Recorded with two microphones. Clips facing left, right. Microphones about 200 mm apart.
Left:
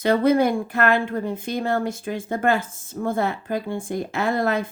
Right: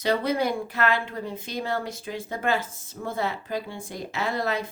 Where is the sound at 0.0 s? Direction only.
50° left (ahead or behind).